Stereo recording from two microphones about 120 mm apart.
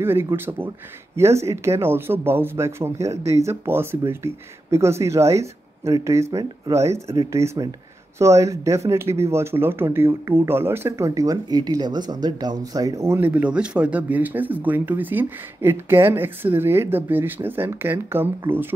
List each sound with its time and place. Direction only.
0.0 s speech: 20° right (ahead or behind)